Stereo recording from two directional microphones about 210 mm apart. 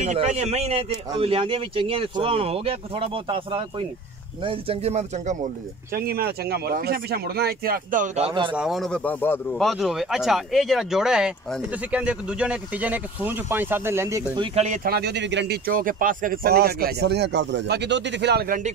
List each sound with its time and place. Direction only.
0.0 s speech: 35° right (ahead or behind)
5.9 s speech: 45° right (ahead or behind)
8.3 s speech: 25° right (ahead or behind)
8.5 s speech: centre (ahead or behind); by 14.8 s 30° right (ahead or behind)
14.9 s speech: 50° right (ahead or behind)